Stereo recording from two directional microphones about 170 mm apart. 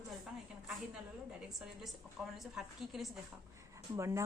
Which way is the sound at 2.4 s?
Centre (ahead or behind).